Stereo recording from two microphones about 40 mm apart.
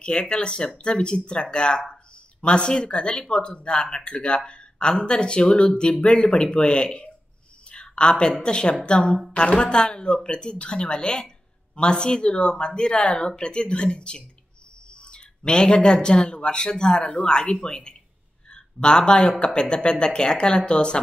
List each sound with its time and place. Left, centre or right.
0.0 s a woman's voice: left